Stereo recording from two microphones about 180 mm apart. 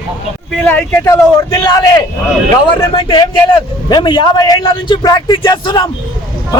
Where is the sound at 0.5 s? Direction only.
10° left (ahead or behind).